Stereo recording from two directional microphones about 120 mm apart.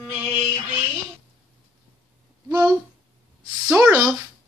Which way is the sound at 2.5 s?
10° right (ahead or behind).